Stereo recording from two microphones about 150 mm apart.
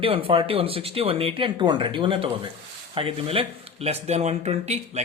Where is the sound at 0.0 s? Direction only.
35° right (ahead or behind).